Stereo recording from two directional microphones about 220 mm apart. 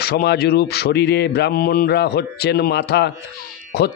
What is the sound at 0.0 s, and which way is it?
A man's voice, 45° left (ahead or behind).